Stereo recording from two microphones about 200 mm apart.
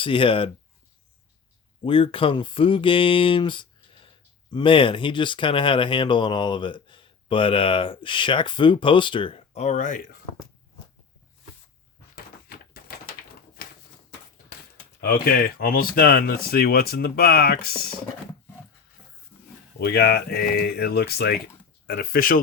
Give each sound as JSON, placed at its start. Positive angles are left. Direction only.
{"t": 0.0, "sound": "speech", "side_deg": 25}
{"t": 1.8, "sound": "speech", "side_deg": 25}
{"t": 12.1, "sound": "a sound", "side_deg": 50}
{"t": 13.6, "sound": "typewriter", "side_deg": 50}
{"t": 15.0, "sound": "speech", "side_deg": 50}
{"t": 19.3, "sound": "a sound", "side_deg": 10}
{"t": 19.8, "sound": "speech", "side_deg": 55}